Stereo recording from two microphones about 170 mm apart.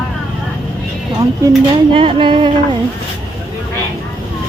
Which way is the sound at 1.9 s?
30° right (ahead or behind).